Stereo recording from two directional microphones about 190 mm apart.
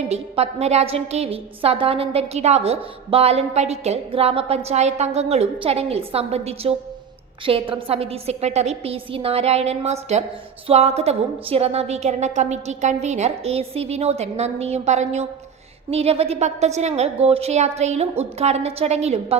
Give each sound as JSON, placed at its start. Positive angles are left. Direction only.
{"t": 0.1, "sound": "a woman's voice", "side_deg": -35}